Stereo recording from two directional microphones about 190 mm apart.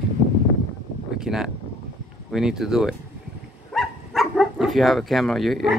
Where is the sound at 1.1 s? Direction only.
5° right (ahead or behind).